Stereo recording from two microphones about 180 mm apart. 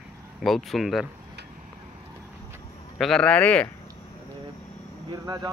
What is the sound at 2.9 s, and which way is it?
Speech, centre (ahead or behind).